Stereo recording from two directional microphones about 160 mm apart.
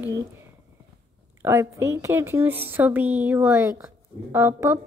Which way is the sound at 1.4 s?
15° right (ahead or behind).